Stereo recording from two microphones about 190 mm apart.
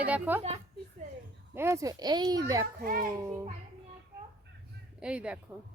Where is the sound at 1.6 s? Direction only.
15° right (ahead or behind).